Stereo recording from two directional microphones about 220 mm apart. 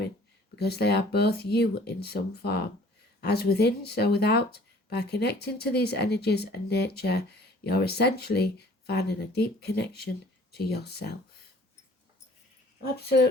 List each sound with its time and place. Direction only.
0.5 s speech: 45° left (ahead or behind)